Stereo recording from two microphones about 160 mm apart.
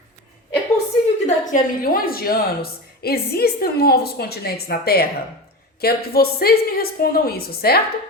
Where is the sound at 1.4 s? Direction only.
60° left (ahead or behind).